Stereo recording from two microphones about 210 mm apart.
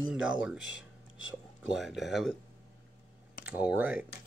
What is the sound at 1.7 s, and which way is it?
Speech, centre (ahead or behind).